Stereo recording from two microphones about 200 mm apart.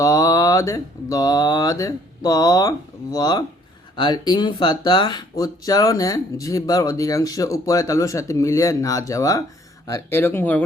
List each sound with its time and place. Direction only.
0.0 s speech: 15° left (ahead or behind)